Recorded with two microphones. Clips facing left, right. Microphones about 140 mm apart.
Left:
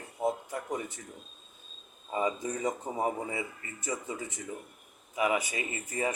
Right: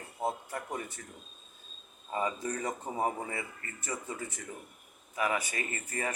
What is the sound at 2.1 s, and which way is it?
A man's voice, 15° left (ahead or behind).